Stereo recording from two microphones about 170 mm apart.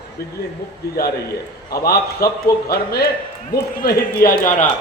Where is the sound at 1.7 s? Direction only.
65° left (ahead or behind).